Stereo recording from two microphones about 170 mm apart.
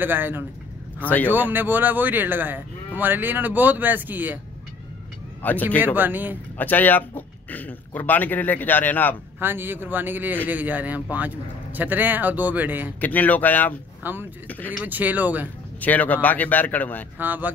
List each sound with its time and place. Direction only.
0.0 s speech: 10° right (ahead or behind)
0.9 s speech: 10° left (ahead or behind)
1.3 s speech: 10° right (ahead or behind)
5.4 s speech: 10° left (ahead or behind)
5.9 s speech: 10° right (ahead or behind)
6.6 s speech: 10° left (ahead or behind)
9.4 s speech: 10° right (ahead or behind)
13.0 s speech: 10° left (ahead or behind)
14.0 s speech: 10° right (ahead or behind)
14.5 s speech: 10° left (ahead or behind)
14.9 s speech: 10° right (ahead or behind)
15.8 s speech: 10° left (ahead or behind)
17.2 s speech: 10° right (ahead or behind)